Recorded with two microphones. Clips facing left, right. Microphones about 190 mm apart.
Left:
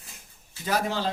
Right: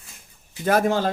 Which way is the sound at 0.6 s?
50° right (ahead or behind).